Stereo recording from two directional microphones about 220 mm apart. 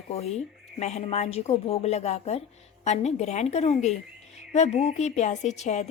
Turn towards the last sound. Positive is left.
turn(degrees=30)  # may be behind; listen again after turning